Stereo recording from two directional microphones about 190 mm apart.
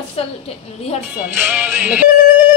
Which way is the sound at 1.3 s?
10° right (ahead or behind).